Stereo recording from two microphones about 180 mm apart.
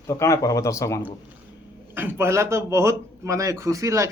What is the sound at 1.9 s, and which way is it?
A man's voice, 10° right (ahead or behind).